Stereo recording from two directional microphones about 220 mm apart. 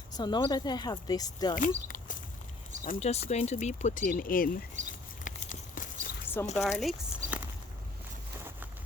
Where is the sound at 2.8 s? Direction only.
35° left (ahead or behind).